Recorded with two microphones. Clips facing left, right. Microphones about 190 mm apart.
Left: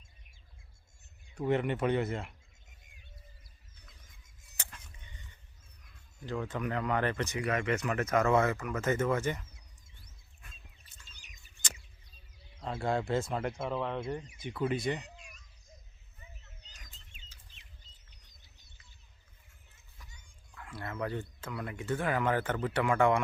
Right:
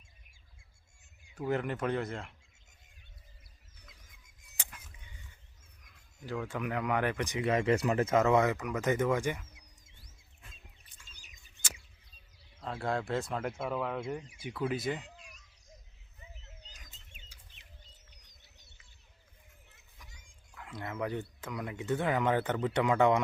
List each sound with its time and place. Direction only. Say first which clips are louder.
1.4 s speech: left 3 dB; centre (ahead or behind)
4.5 s a sound: even; 10° right (ahead or behind)
6.2 s speech: left 1 dB; 5° right (ahead or behind)
7.4 s speech: right 5 dB; 30° right (ahead or behind); by 9.5 s 10° right (ahead or behind)
12.5 s speech: left 2 dB; centre (ahead or behind)
20.6 s a sound: right 1 dB; 20° right (ahead or behind)
20.9 s speech: right 1 dB; 15° right (ahead or behind)